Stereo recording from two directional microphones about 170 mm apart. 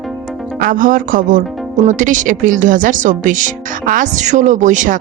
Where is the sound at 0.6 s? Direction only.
55° right (ahead or behind).